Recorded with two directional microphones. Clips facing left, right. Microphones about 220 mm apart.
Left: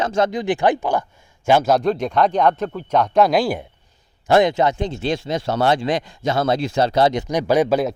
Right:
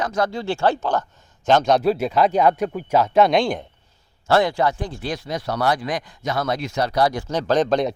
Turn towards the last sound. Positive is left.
turn(degrees=5)  # may be behind; listen again after turning